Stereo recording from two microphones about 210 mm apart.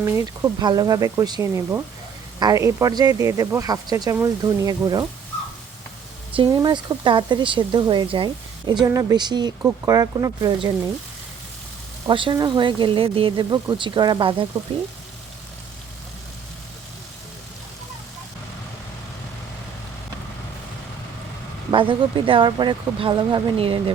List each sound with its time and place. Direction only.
0.0 s speech: 15° right (ahead or behind)
6.3 s speech: 20° right (ahead or behind)
12.0 s speech: 25° right (ahead or behind)
21.7 s speech: 25° right (ahead or behind)